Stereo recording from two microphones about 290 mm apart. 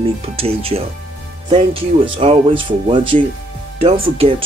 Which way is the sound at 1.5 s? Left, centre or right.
Centre.